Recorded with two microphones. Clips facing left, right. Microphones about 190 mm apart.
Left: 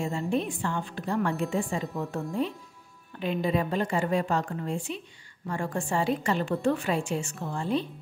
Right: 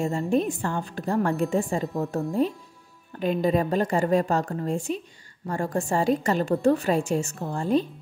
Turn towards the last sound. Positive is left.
turn(degrees=-45)  # may be behind; listen again after turning